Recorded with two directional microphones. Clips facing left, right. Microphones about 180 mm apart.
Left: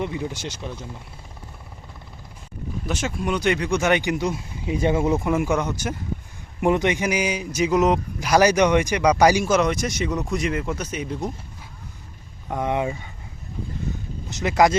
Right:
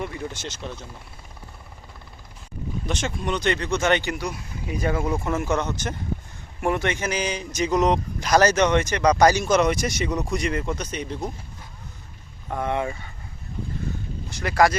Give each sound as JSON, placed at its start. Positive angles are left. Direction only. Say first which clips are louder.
{"t": 0.0, "sound": "speech", "louder": "left 3 dB", "side_deg": 15}
{"t": 2.8, "sound": "speech", "louder": "left 2 dB", "side_deg": 5}
{"t": 5.1, "sound": "speech", "louder": "left 3 dB", "side_deg": 15}
{"t": 12.5, "sound": "speech", "louder": "left 2 dB", "side_deg": 15}
{"t": 14.3, "sound": "speech", "louder": "left 2 dB", "side_deg": 20}